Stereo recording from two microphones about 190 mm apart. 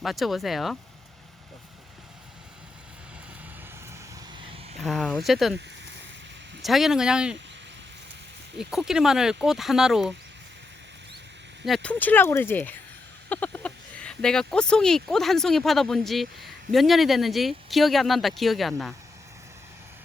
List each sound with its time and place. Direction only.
0.0 s speech: centre (ahead or behind)
4.4 s a sound: 30° right (ahead or behind)
4.8 s speech: centre (ahead or behind)
6.6 s speech: centre (ahead or behind)
8.5 s speech: 5° right (ahead or behind)
11.6 s speech: 5° left (ahead or behind)